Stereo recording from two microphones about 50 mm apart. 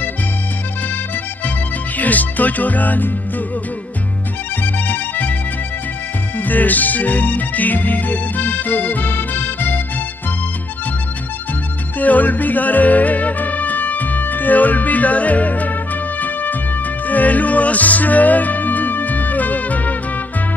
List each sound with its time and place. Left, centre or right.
2.0 s music: left
4.7 s music: left
6.3 s music: left
12.0 s music: left